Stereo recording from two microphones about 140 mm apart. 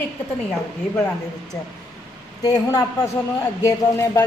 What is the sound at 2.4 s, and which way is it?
Speech, 30° left (ahead or behind).